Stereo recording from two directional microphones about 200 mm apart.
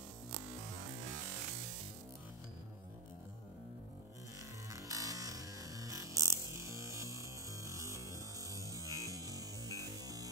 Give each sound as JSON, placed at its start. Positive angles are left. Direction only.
{"t": 4.6, "sound": "music", "side_deg": -15}